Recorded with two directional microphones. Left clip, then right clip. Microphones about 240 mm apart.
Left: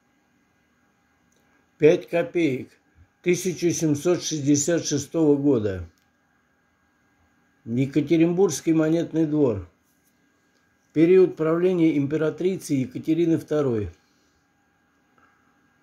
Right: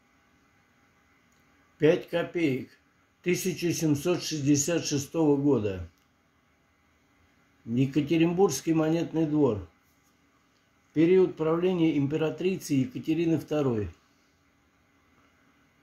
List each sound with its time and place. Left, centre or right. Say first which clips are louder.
1.8 s speech: left 6 dB; centre
7.7 s speech: left 5 dB; centre
10.9 s speech: left 5 dB; centre